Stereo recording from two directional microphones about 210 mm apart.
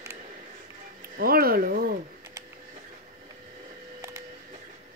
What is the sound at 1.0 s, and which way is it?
Speech, 45° right (ahead or behind).